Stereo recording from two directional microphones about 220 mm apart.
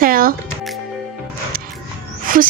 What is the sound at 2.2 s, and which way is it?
Music, 40° right (ahead or behind).